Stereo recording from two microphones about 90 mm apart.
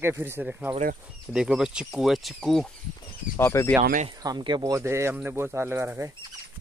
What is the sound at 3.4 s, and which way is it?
Speech, 30° left (ahead or behind).